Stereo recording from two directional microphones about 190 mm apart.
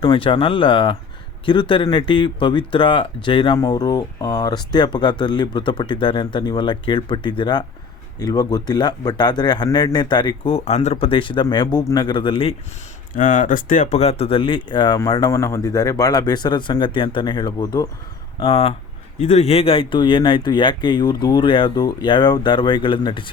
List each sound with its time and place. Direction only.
0.0 s speech: 25° left (ahead or behind)
13.1 s speech: 45° left (ahead or behind); by 23.3 s 25° left (ahead or behind)